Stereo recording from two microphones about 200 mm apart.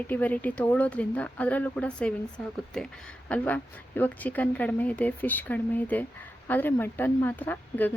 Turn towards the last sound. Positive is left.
turn(degrees=10)  # may be behind; listen again after turning